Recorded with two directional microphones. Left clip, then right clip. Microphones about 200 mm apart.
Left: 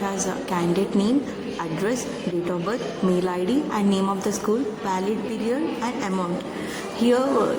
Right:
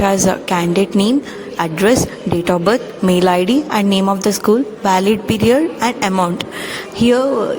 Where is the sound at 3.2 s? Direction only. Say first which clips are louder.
Right 10 dB; 40° right (ahead or behind).